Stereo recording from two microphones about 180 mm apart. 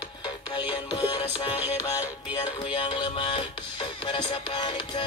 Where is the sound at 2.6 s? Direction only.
30° left (ahead or behind).